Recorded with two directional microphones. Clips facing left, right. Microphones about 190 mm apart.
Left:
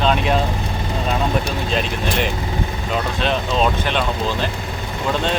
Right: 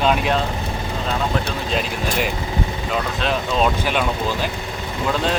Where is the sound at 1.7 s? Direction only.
5° right (ahead or behind).